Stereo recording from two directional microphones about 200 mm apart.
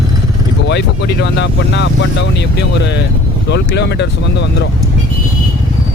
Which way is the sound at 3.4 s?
60° left (ahead or behind).